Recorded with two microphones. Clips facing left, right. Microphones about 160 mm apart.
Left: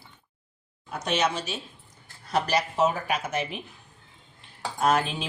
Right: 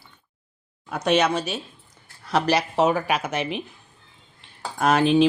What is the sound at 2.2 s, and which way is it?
Speech, 85° right.